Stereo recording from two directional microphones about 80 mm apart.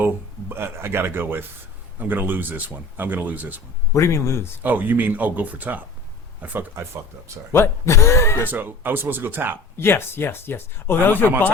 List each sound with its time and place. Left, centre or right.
0.0 s speech: right
3.9 s speech: left
4.6 s speech: right
7.5 s speech: left
8.4 s speech: right
9.7 s speech: left